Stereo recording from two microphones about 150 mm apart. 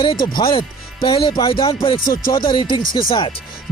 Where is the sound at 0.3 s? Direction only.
35° left (ahead or behind).